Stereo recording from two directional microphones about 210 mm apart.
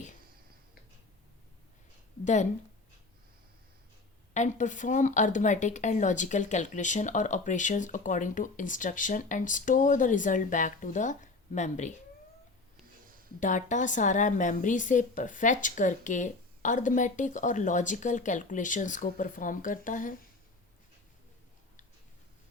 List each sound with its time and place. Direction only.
2.2 s speech: 35° left (ahead or behind)
4.4 s speech: 35° left (ahead or behind)
13.4 s speech: 35° left (ahead or behind)